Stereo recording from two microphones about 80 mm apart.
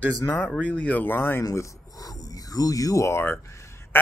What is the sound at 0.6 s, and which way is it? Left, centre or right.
Speech, centre.